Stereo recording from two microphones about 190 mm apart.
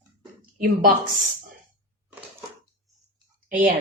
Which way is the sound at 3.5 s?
45° right (ahead or behind).